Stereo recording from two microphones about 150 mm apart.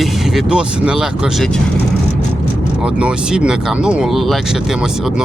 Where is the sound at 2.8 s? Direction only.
5° right (ahead or behind).